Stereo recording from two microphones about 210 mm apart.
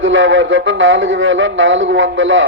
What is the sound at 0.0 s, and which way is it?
Speech, 60° right (ahead or behind).